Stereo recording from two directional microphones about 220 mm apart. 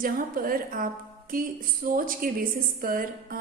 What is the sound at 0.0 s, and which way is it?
A woman's voice, 40° right (ahead or behind).